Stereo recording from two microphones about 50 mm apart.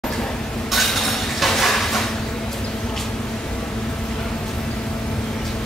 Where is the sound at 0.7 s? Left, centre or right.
Centre.